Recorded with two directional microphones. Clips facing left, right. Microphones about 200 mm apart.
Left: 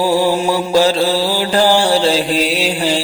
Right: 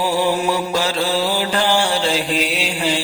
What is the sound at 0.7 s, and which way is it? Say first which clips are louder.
Mantra: left 7 dB; 35° left (ahead or behind).